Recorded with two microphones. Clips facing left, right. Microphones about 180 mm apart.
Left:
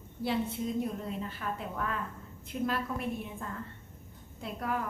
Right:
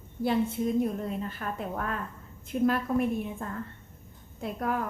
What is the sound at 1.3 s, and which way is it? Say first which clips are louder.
A woman's voice: right 3 dB; 50° right (ahead or behind).